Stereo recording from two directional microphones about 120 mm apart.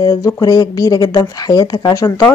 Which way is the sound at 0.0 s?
35° left (ahead or behind).